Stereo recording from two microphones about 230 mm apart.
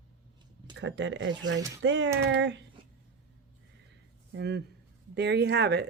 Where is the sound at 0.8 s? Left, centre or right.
Right.